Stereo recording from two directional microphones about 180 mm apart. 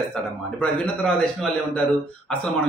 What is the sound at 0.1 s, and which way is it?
A man's voice, 5° left (ahead or behind).